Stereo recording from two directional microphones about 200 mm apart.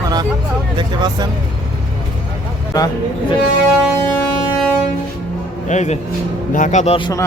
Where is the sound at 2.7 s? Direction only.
20° left (ahead or behind).